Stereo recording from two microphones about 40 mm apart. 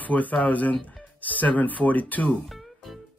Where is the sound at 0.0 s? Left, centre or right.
Left.